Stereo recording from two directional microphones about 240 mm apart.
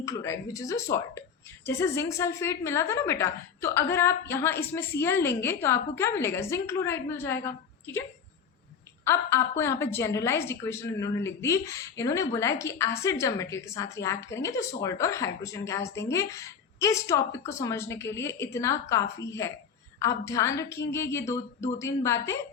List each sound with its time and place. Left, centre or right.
0.0 s a woman's voice: centre
9.0 s a woman's voice: centre